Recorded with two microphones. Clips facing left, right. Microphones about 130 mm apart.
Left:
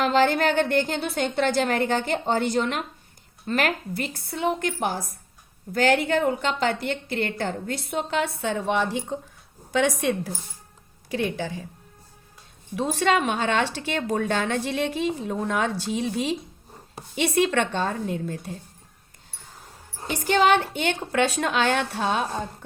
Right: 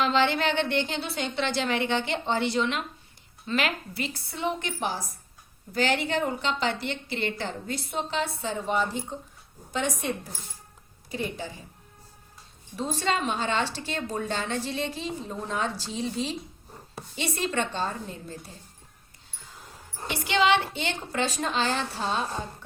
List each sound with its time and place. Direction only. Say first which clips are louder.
0.0 s a woman's voice: left 4 dB; 45° left (ahead or behind); by 11.6 s 85° left
12.7 s a woman's voice: left 6 dB; 65° left (ahead or behind)
20.1 s a woman's voice: left 4 dB; 45° left (ahead or behind); by 22.4 s 60° left (ahead or behind)